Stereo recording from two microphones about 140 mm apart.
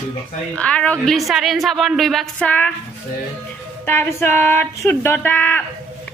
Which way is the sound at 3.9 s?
15° left (ahead or behind).